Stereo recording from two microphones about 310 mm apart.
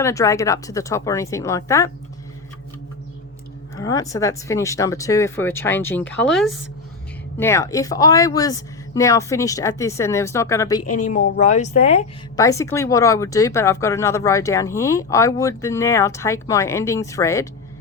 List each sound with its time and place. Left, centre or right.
0.0 s speech: centre
3.8 s speech: centre
11.0 s speech: left
12.4 s speech: centre